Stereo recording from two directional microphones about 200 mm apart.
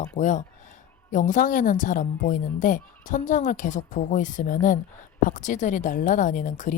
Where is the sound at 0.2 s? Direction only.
35° left (ahead or behind).